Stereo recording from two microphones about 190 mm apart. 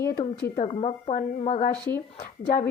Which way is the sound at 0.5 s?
35° left (ahead or behind).